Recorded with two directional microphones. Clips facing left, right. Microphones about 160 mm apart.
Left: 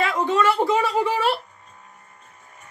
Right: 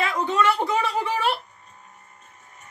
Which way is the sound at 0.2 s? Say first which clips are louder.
Left 2 dB; 5° left (ahead or behind).